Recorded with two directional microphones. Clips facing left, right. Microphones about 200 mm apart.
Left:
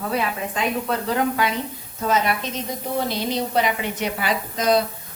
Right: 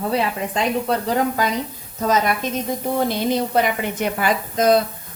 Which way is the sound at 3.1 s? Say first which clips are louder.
Right 4 dB; 50° right (ahead or behind).